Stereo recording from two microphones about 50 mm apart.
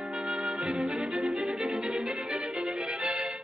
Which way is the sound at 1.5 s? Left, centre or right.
Centre.